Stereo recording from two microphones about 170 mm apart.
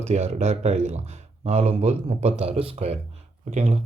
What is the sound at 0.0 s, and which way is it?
Speech, 40° right (ahead or behind).